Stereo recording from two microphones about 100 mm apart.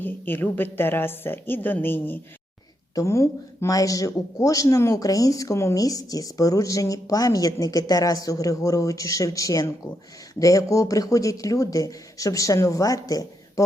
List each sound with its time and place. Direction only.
0.0 s a woman's voice: 20° left (ahead or behind)
2.9 s speech: 30° left (ahead or behind)